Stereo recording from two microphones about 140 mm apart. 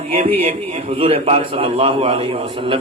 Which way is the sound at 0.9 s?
40° right (ahead or behind).